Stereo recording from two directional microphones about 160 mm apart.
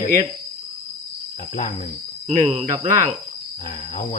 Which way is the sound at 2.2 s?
45° right (ahead or behind).